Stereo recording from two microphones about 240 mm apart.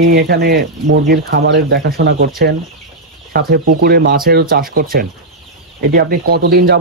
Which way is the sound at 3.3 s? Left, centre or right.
Right.